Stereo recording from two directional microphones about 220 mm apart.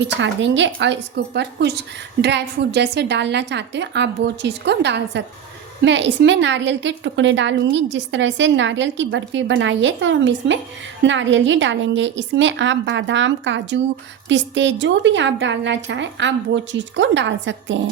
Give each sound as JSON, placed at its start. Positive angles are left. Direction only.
{"t": 0.0, "sound": "a woman's voice", "side_deg": -55}